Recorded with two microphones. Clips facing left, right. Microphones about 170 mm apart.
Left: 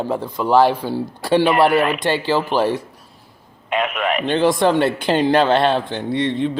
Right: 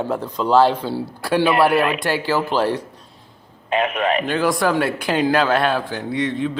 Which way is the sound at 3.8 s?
30° right (ahead or behind).